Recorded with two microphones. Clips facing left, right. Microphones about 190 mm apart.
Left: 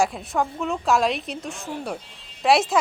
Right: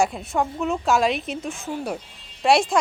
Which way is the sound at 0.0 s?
Centre (ahead or behind).